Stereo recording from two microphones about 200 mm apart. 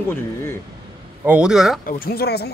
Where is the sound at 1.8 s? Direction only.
45° left (ahead or behind).